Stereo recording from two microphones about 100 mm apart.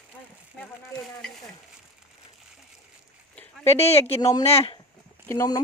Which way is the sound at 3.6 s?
90° left.